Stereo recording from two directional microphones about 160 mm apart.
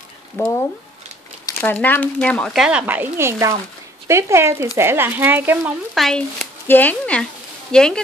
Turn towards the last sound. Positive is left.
turn(degrees=5)  # may be behind; listen again after turning